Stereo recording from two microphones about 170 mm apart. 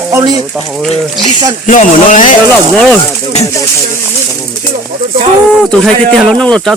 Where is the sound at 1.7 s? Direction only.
50° left (ahead or behind).